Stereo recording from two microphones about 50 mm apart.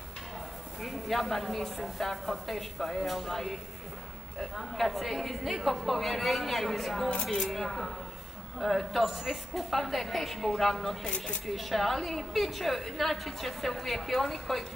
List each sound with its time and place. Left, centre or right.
0.8 s a woman's voice: centre
11.1 s speech: centre
11.4 s a woman's voice: centre